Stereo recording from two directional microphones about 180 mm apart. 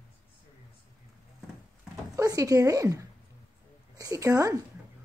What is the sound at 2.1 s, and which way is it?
Speech, 20° right (ahead or behind).